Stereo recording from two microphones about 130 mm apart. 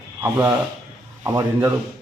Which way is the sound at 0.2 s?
15° right (ahead or behind).